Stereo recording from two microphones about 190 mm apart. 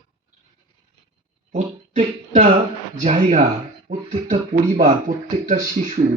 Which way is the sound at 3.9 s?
55° right (ahead or behind).